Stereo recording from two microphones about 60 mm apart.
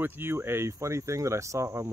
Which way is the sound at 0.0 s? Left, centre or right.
Right.